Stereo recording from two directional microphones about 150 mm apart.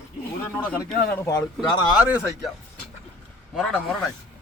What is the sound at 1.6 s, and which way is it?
Speech, 30° left (ahead or behind).